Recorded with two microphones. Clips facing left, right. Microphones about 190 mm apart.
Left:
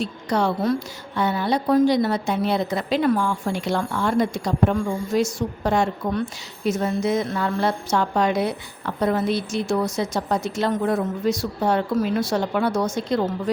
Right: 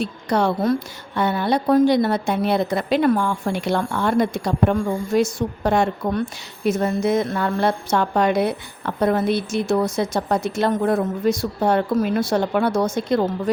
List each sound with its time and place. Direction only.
0.0 s a woman's voice: 55° right (ahead or behind)